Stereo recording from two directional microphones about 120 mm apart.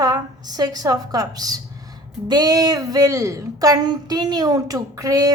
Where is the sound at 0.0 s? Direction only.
35° right (ahead or behind).